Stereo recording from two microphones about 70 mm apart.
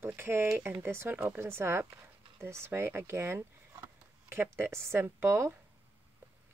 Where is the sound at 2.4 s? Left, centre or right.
Right.